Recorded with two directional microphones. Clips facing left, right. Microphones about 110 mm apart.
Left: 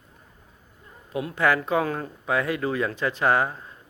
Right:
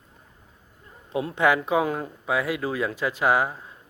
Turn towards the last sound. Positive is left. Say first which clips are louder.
# even
turn(degrees=-5)  # may be behind; listen again after turning